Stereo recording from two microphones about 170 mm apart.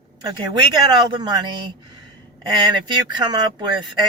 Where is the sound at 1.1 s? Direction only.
25° right (ahead or behind).